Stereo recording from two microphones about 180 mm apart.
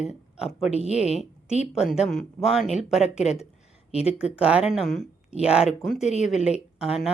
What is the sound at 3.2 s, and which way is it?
Speech, 35° left (ahead or behind).